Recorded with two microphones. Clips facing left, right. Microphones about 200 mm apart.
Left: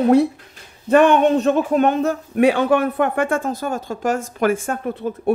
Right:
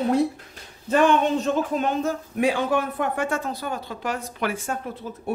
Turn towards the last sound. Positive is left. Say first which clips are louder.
# left 9 dB
turn(degrees=55)  # may be behind; listen again after turning